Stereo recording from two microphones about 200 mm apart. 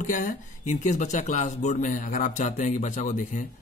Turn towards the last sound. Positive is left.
turn(degrees=40)  # may be behind; listen again after turning